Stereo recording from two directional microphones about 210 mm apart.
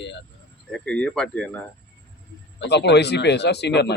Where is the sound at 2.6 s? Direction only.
55° left (ahead or behind).